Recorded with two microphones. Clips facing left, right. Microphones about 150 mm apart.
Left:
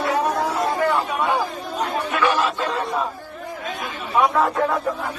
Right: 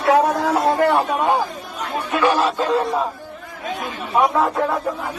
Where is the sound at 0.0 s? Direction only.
70° right (ahead or behind).